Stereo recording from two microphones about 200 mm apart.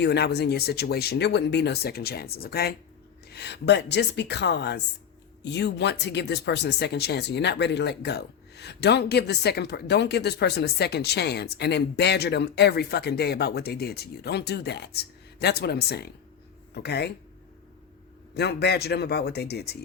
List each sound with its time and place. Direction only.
0.0 s speech: 55° left (ahead or behind)
18.3 s speech: 55° left (ahead or behind)